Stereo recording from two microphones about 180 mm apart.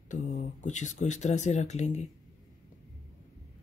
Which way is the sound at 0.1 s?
45° left (ahead or behind).